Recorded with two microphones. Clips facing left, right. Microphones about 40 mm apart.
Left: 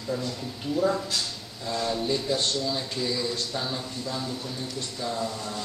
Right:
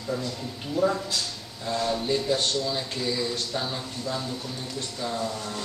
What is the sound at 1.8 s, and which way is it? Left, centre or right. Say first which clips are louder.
Speech: right 1 dB; centre.